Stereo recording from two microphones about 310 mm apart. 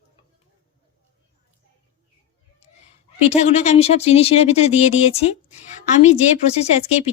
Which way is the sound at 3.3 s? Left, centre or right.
Left.